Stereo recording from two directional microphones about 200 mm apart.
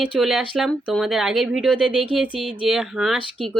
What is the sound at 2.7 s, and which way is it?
Speech, 5° right (ahead or behind).